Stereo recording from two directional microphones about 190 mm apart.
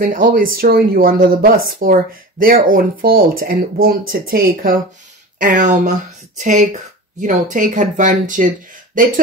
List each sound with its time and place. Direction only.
0.0 s speech: 45° right (ahead or behind)